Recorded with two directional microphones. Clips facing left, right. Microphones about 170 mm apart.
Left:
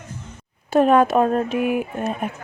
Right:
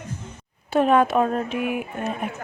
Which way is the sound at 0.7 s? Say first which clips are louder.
Left 3 dB; 45° left (ahead or behind).